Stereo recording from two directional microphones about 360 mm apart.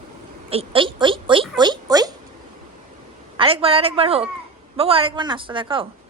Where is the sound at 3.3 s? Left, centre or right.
Centre.